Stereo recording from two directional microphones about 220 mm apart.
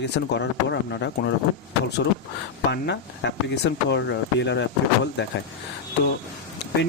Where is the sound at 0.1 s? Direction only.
55° left (ahead or behind).